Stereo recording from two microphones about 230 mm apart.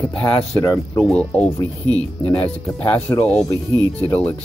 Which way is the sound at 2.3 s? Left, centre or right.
Centre.